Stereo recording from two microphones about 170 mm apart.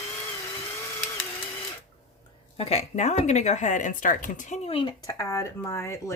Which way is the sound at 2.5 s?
35° left (ahead or behind).